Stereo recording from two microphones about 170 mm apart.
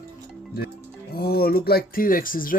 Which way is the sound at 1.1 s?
65° left (ahead or behind).